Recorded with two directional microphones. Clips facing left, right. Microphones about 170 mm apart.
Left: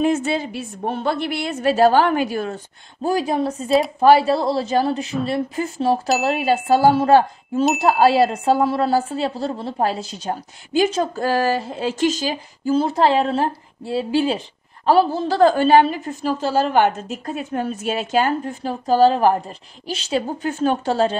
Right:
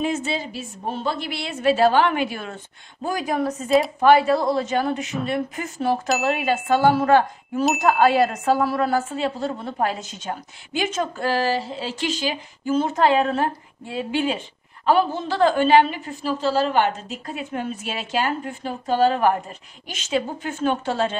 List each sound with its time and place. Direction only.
0.0 s a woman's voice: 55° left (ahead or behind); by 21.2 s 35° left (ahead or behind)